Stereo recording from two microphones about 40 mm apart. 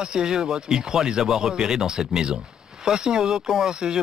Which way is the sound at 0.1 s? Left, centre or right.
Centre.